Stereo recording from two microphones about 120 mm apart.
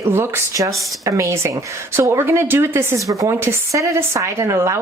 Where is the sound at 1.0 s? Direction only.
25° right (ahead or behind).